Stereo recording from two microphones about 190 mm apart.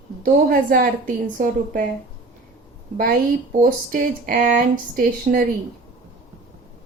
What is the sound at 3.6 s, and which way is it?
A woman's voice, 45° right (ahead or behind).